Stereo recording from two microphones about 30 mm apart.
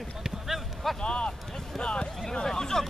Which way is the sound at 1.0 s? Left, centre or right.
Left.